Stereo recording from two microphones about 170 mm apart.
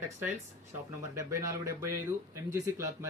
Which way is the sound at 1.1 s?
15° right (ahead or behind).